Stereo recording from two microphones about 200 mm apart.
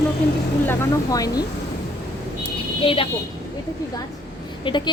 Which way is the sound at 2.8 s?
25° left (ahead or behind).